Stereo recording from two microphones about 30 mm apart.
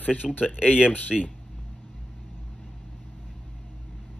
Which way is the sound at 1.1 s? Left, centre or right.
Centre.